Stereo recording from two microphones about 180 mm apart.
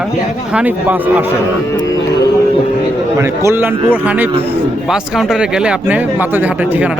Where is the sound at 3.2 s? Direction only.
15° right (ahead or behind).